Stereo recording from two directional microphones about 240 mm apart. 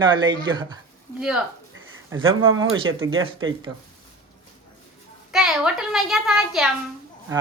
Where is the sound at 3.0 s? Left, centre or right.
Right.